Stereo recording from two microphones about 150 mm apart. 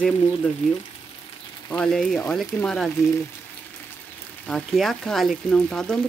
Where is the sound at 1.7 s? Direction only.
5° left (ahead or behind).